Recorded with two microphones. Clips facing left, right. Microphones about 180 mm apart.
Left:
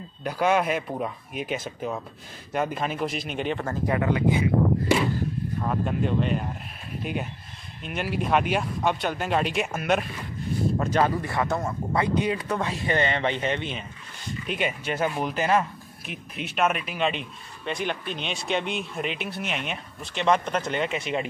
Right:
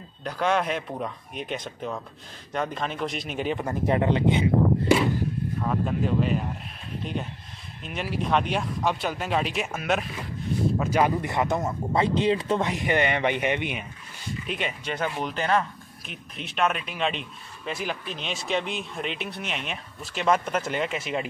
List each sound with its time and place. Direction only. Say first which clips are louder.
0.2 s speech: left 2 dB; 5° left (ahead or behind)
3.6 s speech: right 3 dB; 20° right (ahead or behind)
5.6 s speech: even; centre (ahead or behind)
10.8 s speech: even; 10° right (ahead or behind)
14.4 s speech: left 3 dB; centre (ahead or behind)